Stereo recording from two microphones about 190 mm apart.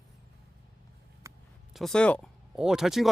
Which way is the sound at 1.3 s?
15° right (ahead or behind).